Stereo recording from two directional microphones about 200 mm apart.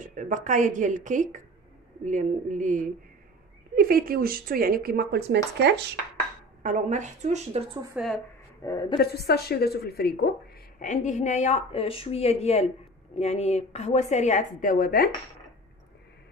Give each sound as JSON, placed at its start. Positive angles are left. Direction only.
{"t": 0.0, "sound": "speech", "side_deg": -40}
{"t": 6.6, "sound": "speech", "side_deg": -40}
{"t": 8.0, "sound": "a woman's voice", "side_deg": -5}
{"t": 8.6, "sound": "a woman's voice", "side_deg": 20}
{"t": 9.0, "sound": "a woman's voice", "side_deg": 50}
{"t": 10.8, "sound": "a woman's voice", "side_deg": 40}